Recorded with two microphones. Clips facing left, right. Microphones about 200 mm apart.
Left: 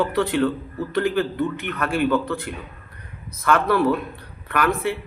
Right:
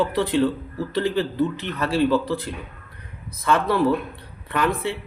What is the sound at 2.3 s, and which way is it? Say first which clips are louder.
Speech: right 1 dB; 20° right (ahead or behind).